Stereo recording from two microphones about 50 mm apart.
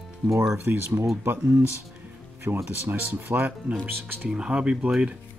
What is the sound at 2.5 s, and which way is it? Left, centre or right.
Speech, right.